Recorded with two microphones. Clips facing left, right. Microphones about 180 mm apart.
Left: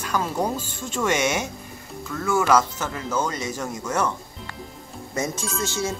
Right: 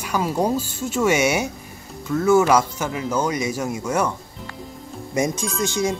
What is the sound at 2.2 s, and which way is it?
Speech, 25° right (ahead or behind).